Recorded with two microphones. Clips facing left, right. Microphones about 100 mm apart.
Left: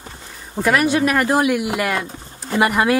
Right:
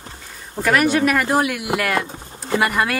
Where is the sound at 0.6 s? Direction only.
10° left (ahead or behind).